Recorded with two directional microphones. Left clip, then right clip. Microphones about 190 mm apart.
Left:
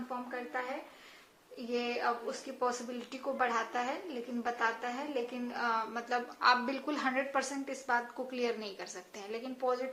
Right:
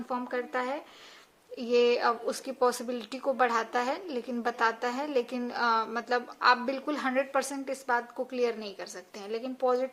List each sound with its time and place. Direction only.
0.1 s a woman's voice: 40° right (ahead or behind)